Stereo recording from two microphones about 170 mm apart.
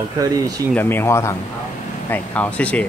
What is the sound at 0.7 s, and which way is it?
Speech, 10° left (ahead or behind).